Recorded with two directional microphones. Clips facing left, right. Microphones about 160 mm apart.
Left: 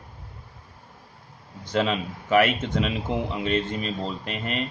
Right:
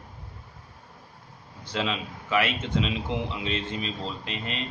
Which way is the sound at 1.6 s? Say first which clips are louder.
Left 5 dB; 45° left (ahead or behind).